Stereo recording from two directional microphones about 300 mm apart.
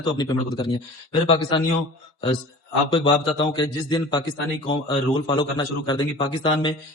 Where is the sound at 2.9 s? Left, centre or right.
Centre.